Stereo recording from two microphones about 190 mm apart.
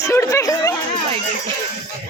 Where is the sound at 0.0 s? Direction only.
15° left (ahead or behind).